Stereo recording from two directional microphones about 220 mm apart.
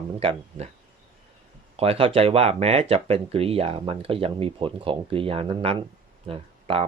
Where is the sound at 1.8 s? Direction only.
25° right (ahead or behind).